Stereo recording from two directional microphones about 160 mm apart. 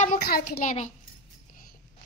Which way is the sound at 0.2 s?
85° left.